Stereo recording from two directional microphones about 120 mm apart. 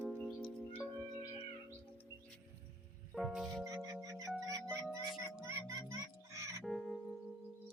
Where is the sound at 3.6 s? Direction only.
30° right (ahead or behind).